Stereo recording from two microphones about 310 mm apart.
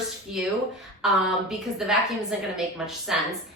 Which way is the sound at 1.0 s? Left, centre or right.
Centre.